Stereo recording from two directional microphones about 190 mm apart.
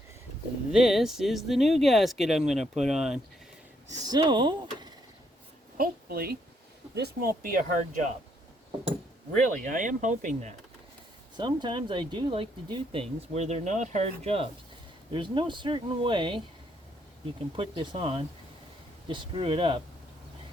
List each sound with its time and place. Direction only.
0.7 s speech: centre (ahead or behind)
3.8 s speech: 20° right (ahead or behind)
5.7 s a woman's voice: 50° right (ahead or behind)
7.4 s speech: 45° right (ahead or behind)
9.6 s speech: 45° right (ahead or behind)
11.3 s speech: 25° right (ahead or behind)
17.6 s speech: 30° right (ahead or behind)